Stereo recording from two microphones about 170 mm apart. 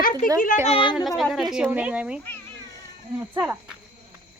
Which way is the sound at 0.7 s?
30° left (ahead or behind).